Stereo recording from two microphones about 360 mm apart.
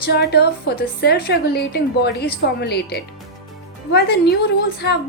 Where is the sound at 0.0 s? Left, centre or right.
Left.